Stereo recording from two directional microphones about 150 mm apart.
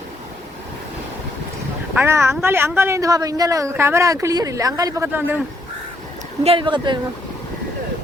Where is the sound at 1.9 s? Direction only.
15° right (ahead or behind).